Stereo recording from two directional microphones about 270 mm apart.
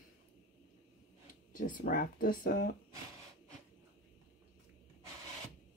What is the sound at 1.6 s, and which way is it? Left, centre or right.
Speech, left.